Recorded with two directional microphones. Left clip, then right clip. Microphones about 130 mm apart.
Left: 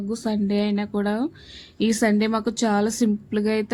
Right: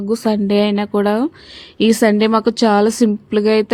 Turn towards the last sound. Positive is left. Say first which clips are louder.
# right 10 dB
turn(degrees=-50)  # may be behind; listen again after turning